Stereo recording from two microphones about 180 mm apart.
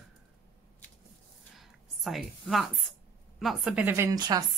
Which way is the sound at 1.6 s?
Centre (ahead or behind).